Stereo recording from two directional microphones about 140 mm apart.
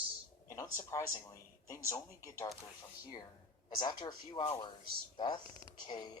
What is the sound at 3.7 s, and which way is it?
Speech, 35° left (ahead or behind).